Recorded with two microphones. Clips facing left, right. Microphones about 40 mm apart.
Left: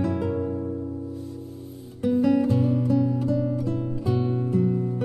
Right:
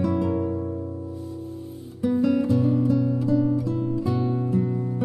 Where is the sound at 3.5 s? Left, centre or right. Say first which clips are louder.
Right 2 dB; left.